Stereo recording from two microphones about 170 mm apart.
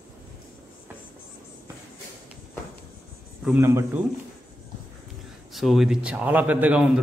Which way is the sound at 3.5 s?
15° right (ahead or behind).